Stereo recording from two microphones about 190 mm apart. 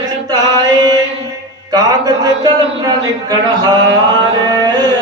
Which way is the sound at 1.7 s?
20° right (ahead or behind).